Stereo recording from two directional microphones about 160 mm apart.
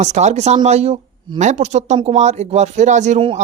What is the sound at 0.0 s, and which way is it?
Speech, 45° right (ahead or behind).